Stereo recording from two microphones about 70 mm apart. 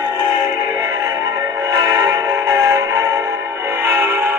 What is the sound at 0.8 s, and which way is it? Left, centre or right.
Music, right.